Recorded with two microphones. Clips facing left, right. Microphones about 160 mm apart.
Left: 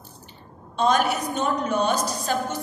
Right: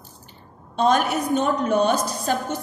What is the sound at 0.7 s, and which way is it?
A woman's voice, 50° right (ahead or behind).